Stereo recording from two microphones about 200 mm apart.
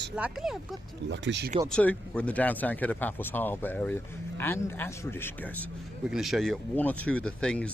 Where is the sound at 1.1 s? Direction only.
60° right (ahead or behind).